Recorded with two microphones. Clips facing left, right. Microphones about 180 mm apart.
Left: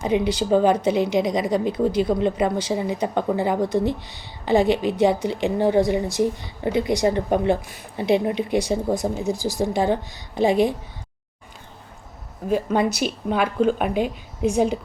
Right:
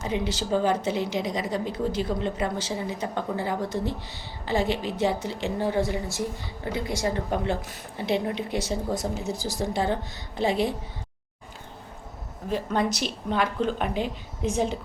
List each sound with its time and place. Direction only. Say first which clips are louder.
0.0 s a woman's voice: left 7 dB; 15° left (ahead or behind)
12.5 s a woman's voice: left 5 dB; 10° left (ahead or behind)